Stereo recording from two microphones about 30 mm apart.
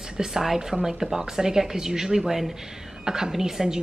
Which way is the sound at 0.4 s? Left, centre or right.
Centre.